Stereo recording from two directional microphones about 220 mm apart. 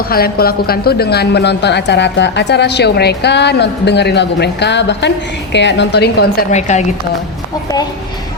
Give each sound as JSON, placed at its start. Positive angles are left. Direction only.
{"t": 0.1, "sound": "a woman's voice", "side_deg": 45}
{"t": 6.5, "sound": "a woman's voice", "side_deg": 30}